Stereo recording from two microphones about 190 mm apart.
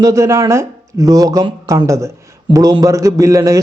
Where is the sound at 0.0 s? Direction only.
15° right (ahead or behind).